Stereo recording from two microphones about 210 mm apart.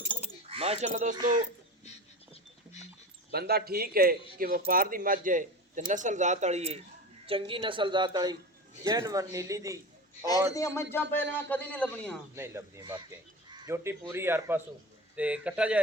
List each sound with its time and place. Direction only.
0.4 s speech: 30° right (ahead or behind)
3.3 s a man's voice: 50° right (ahead or behind); by 10.2 s 15° right (ahead or behind)
10.5 s a man's voice: 15° left (ahead or behind)
12.3 s speech: 10° right (ahead or behind)